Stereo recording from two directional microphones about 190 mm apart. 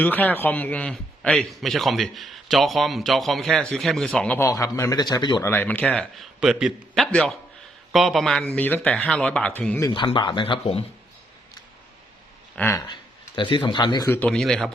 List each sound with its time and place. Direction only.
0.0 s a man's voice: 10° left (ahead or behind)
5.5 s a man's voice: 10° left (ahead or behind)
9.9 s speech: 25° left (ahead or behind)
12.5 s speech: 10° left (ahead or behind)
12.9 s speech: 25° left (ahead or behind)
14.1 s a man's voice: 5° left (ahead or behind)